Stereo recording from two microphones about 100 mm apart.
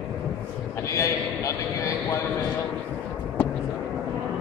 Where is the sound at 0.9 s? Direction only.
30° left (ahead or behind).